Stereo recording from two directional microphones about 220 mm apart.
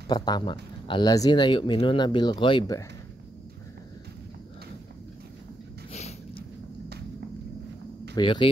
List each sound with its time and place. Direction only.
0.1 s speech: 20° left (ahead or behind)
5.9 s a sound: 30° left (ahead or behind)
8.2 s speech: 25° left (ahead or behind)